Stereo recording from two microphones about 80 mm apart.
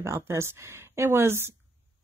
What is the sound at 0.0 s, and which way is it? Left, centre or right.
Speech, right.